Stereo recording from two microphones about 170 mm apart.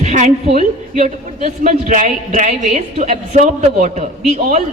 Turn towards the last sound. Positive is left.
turn(degrees=-40)  # may be behind; listen again after turning